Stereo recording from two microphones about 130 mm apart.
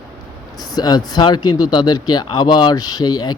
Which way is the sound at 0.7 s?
30° left (ahead or behind).